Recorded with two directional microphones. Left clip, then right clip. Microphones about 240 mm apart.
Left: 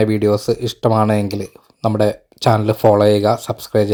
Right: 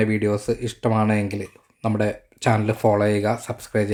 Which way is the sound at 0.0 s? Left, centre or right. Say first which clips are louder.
Left 7 dB; left.